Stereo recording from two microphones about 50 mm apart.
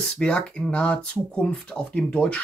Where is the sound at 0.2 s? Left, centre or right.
Left.